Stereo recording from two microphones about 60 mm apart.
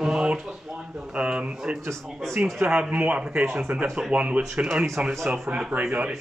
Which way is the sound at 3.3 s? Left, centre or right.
Right.